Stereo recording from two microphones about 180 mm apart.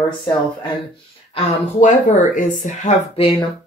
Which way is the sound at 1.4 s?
45° left (ahead or behind).